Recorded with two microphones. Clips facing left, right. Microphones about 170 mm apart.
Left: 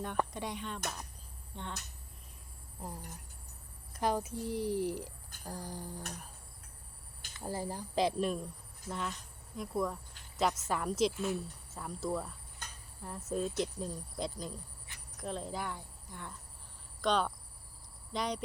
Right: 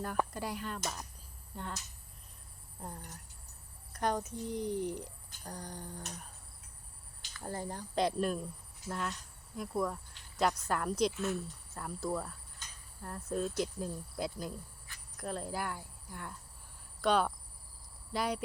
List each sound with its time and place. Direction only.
0.0 s speech: 5° right (ahead or behind)
2.8 s speech: 5° left (ahead or behind)
7.4 s speech: 5° left (ahead or behind)
12.6 s a sound: 60° left (ahead or behind)
13.0 s speech: 5° left (ahead or behind)